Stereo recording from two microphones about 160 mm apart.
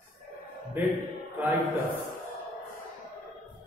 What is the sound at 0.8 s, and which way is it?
Speech, 15° right (ahead or behind).